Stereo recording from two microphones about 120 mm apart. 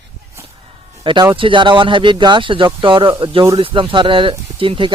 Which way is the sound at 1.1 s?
45° right (ahead or behind).